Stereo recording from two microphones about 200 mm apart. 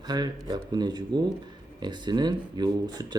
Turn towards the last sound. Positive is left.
turn(degrees=-20)  # may be behind; listen again after turning